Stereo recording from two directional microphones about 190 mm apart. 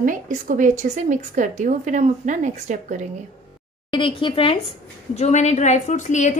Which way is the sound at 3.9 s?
25° left (ahead or behind).